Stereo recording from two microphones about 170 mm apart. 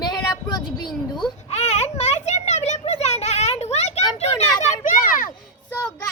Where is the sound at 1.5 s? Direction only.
40° left (ahead or behind).